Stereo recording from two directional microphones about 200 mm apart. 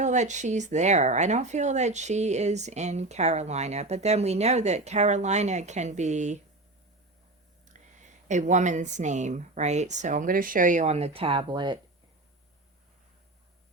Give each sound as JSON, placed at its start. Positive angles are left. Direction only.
{"t": 0.0, "sound": "speech", "side_deg": -35}
{"t": 7.7, "sound": "speech", "side_deg": -35}